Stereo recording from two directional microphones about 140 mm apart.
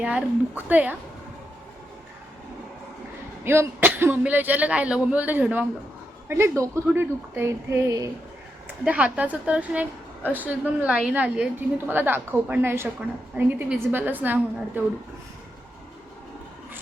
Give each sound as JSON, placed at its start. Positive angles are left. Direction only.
{"t": 0.0, "sound": "speech", "side_deg": -10}
{"t": 3.4, "sound": "speech", "side_deg": -15}
{"t": 8.8, "sound": "speech", "side_deg": -10}